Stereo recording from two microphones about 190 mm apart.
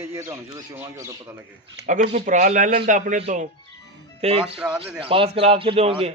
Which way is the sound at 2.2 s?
40° right (ahead or behind).